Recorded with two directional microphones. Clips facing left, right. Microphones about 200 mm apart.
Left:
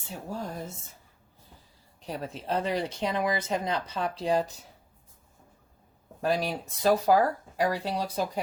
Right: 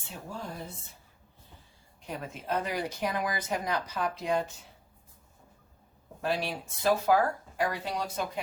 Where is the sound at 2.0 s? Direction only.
35° left (ahead or behind).